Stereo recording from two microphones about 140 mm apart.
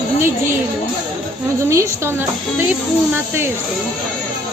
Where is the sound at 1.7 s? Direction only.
20° right (ahead or behind).